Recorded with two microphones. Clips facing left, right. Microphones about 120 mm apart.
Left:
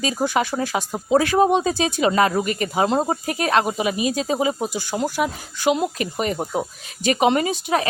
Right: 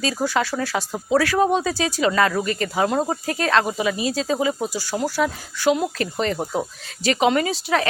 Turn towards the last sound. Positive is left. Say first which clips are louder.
# even
turn(degrees=20)  # may be behind; listen again after turning